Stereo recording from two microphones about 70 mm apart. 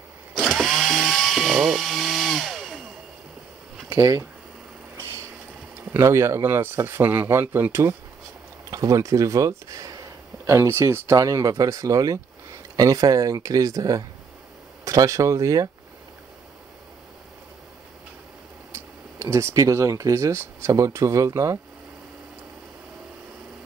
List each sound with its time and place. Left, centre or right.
0.3 s drill: centre
5.9 s speech: right
8.6 s speech: right
11.2 s speech: right
19.1 s speech: right